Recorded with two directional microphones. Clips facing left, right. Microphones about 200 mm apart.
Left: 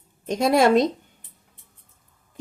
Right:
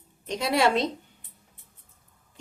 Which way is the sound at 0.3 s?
45° left (ahead or behind).